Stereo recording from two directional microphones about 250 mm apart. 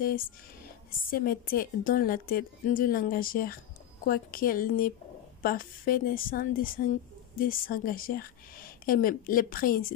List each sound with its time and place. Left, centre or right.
1.1 s a woman's voice: left